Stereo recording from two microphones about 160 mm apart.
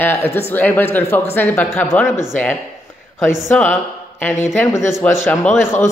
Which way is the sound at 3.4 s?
10° left (ahead or behind).